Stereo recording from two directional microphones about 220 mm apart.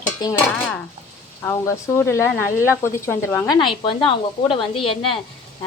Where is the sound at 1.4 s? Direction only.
15° left (ahead or behind).